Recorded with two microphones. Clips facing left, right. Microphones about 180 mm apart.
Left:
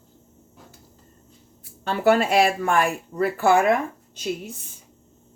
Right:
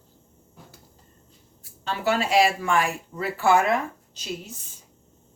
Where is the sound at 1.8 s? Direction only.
55° left (ahead or behind).